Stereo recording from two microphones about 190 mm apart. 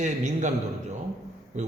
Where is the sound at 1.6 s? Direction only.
40° right (ahead or behind).